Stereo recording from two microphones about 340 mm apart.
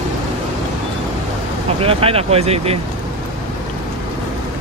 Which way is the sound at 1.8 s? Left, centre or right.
Centre.